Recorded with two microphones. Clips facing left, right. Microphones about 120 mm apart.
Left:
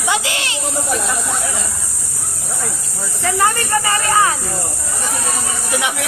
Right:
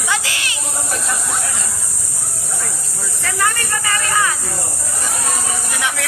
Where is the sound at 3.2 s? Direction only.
25° left (ahead or behind).